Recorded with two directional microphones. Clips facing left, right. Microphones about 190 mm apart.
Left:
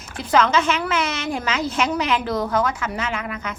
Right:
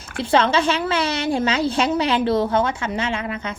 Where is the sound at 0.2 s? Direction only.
30° right (ahead or behind).